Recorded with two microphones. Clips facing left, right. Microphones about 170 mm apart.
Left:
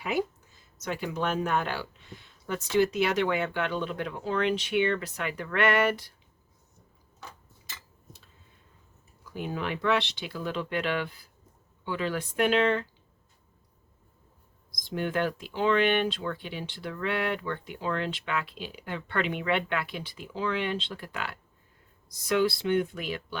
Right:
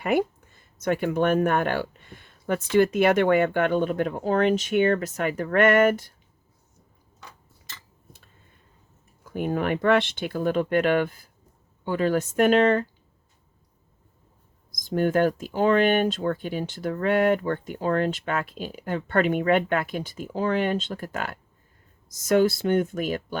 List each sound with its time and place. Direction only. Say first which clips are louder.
0.0 s speech: right 6 dB; 55° right (ahead or behind)
9.2 s speech: right 7 dB; 50° right (ahead or behind)
14.7 s speech: right 8 dB; 45° right (ahead or behind)